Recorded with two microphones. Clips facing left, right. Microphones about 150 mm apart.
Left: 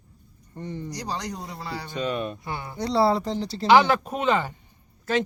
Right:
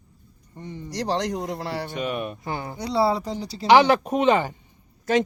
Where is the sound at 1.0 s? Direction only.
80° right.